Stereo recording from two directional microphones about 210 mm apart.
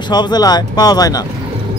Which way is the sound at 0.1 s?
20° left (ahead or behind).